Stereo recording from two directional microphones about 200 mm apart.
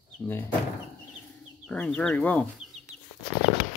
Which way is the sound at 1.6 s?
5° left (ahead or behind).